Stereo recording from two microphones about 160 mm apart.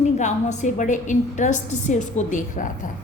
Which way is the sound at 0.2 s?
45° left (ahead or behind).